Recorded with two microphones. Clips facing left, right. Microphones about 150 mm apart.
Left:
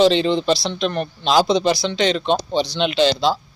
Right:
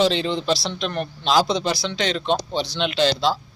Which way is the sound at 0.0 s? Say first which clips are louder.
Left 5 dB; 5° right (ahead or behind).